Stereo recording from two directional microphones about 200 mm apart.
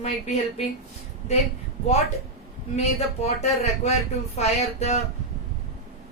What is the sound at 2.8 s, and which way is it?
Speech, 30° left (ahead or behind).